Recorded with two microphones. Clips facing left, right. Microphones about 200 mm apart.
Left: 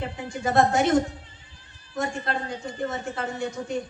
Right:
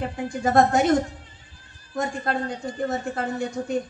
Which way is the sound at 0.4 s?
50° right (ahead or behind).